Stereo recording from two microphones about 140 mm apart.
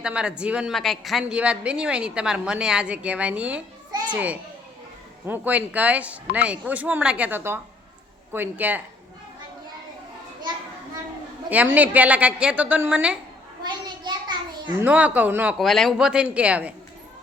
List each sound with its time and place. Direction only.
0.0 s a woman's voice: 5° right (ahead or behind)
11.4 s a woman's voice: 10° right (ahead or behind)
13.7 s a sound: 30° right (ahead or behind)
14.8 s a woman's voice: 10° right (ahead or behind)
15.5 s a woman's voice: centre (ahead or behind)